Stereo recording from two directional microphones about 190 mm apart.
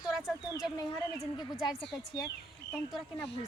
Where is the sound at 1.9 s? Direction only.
20° left (ahead or behind).